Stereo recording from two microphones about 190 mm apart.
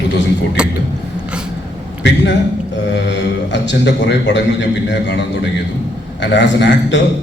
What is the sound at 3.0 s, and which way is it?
A man's voice, 70° left (ahead or behind).